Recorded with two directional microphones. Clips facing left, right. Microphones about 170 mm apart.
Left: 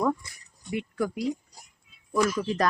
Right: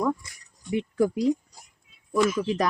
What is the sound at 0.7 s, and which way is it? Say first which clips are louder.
Speech: right 5 dB; 25° right (ahead or behind).